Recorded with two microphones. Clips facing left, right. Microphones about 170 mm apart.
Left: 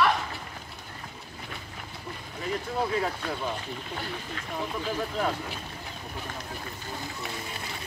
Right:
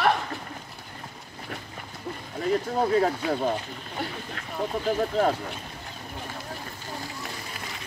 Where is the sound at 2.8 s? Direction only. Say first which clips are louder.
Right 5 dB; 40° right (ahead or behind).